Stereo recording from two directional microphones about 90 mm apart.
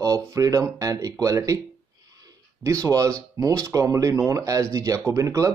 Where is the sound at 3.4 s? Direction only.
35° right (ahead or behind).